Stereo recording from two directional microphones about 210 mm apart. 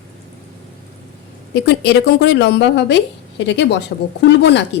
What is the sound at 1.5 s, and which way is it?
Speech, 50° left (ahead or behind).